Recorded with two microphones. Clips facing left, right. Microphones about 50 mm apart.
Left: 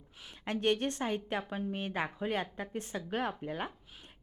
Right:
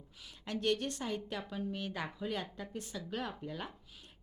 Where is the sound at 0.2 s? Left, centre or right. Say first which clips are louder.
Left 4 dB; left.